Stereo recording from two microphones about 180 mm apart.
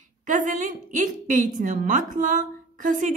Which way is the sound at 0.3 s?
45° right (ahead or behind).